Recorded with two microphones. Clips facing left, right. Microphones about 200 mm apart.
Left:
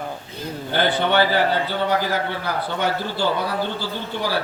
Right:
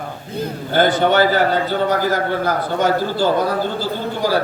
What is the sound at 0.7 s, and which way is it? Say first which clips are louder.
A man's voice: right 5 dB; 45° right (ahead or behind).